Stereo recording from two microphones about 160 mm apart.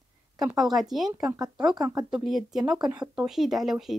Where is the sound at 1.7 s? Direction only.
25° right (ahead or behind).